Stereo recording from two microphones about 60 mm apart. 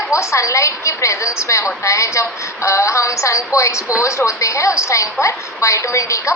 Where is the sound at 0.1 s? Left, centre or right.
Left.